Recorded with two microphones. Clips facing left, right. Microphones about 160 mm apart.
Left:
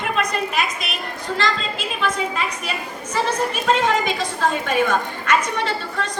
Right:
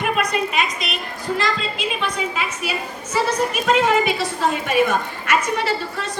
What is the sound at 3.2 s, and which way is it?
A woman's voice, 10° right (ahead or behind).